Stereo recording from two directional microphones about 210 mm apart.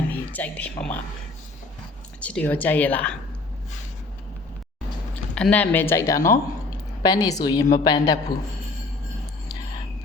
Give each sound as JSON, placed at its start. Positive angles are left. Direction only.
{"t": 0.1, "sound": "speech", "side_deg": 10}
{"t": 2.2, "sound": "speech", "side_deg": 5}
{"t": 5.3, "sound": "a man's voice", "side_deg": 5}